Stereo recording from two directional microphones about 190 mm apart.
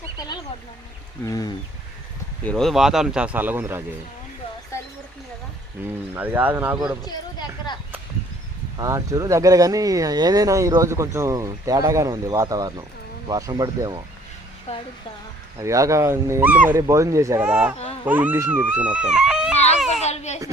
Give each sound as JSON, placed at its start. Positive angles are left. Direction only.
{"t": 1.2, "sound": "speech", "side_deg": 20}
{"t": 2.4, "sound": "speech", "side_deg": 5}
{"t": 6.1, "sound": "speech", "side_deg": -10}
{"t": 7.0, "sound": "a sound", "side_deg": 20}
{"t": 8.8, "sound": "speech", "side_deg": -20}
{"t": 14.7, "sound": "speech", "side_deg": 30}
{"t": 15.5, "sound": "speech", "side_deg": -15}
{"t": 19.9, "sound": "baby cry", "side_deg": 35}